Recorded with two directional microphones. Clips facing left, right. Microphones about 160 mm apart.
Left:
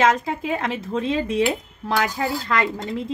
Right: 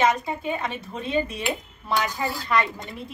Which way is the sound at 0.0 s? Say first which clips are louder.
Left 3 dB; 90° left.